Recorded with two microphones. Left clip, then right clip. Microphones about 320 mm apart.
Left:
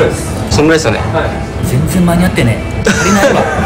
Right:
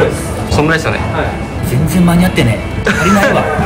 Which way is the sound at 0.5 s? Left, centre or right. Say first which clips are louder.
Left 3 dB; centre.